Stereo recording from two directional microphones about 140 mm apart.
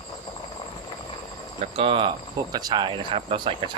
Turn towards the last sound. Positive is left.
turn(degrees=-40)  # may be behind; listen again after turning